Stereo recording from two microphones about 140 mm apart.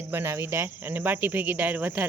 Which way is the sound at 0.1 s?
20° right (ahead or behind).